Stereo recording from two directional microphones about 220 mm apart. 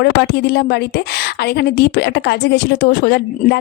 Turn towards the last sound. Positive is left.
turn(degrees=50)  # may be behind; listen again after turning